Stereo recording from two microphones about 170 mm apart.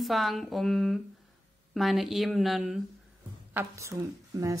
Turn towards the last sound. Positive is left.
turn(degrees=-20)  # may be behind; listen again after turning